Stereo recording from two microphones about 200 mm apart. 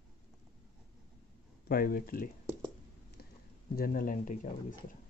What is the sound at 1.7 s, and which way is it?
Speech, 45° left (ahead or behind).